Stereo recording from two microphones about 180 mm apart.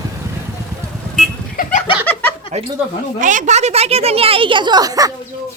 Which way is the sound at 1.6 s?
50° left (ahead or behind).